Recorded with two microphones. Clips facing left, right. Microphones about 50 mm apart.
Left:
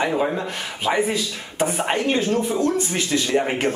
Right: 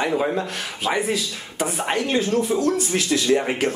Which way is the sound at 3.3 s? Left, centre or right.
Centre.